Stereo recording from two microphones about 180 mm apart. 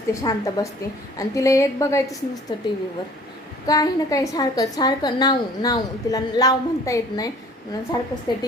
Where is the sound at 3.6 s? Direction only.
20° left (ahead or behind).